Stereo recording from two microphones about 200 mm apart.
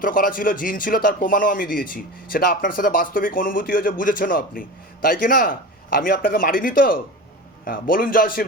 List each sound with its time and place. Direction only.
0.0 s a man's voice: 45° left (ahead or behind)